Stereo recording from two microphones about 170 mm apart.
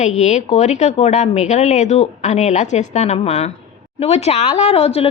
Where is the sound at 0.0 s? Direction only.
45° left (ahead or behind).